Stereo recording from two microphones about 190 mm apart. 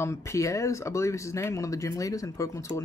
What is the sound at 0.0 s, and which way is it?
Speech, 15° left (ahead or behind).